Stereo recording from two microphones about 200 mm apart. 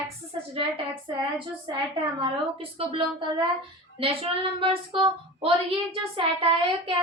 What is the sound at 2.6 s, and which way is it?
Speech, 30° right (ahead or behind).